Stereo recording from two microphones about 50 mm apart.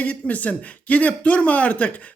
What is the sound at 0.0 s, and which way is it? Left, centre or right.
Speech, left.